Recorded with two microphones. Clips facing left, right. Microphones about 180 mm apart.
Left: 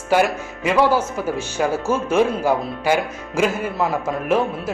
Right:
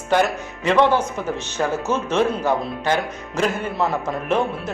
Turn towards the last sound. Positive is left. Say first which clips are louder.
# left 2 dB
turn(degrees=5)  # may be behind; listen again after turning